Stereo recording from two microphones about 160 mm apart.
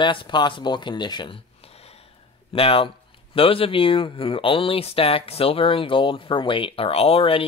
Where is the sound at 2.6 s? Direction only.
35° left (ahead or behind).